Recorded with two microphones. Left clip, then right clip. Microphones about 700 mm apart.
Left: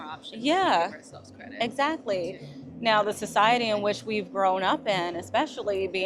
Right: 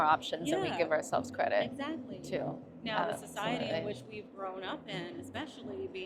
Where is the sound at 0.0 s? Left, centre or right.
Right.